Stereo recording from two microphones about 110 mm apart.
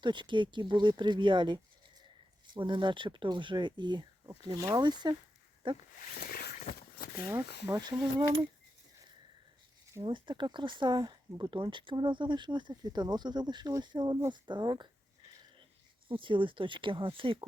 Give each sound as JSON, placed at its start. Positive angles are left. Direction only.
{"t": 0.0, "sound": "speech", "side_deg": -45}
{"t": 7.3, "sound": "speech", "side_deg": -35}
{"t": 10.0, "sound": "speech", "side_deg": -45}
{"t": 16.0, "sound": "speech", "side_deg": -50}